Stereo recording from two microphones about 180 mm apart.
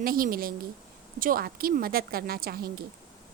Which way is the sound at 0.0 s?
55° right (ahead or behind).